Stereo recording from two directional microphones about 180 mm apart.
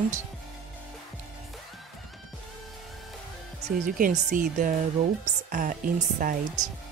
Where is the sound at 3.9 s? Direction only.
45° right (ahead or behind).